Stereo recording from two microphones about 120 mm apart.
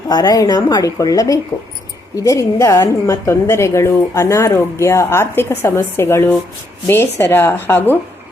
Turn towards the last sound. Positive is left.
turn(degrees=20)  # may be behind; listen again after turning